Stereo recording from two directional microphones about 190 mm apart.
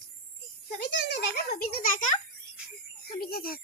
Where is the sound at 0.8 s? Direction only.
60° left (ahead or behind).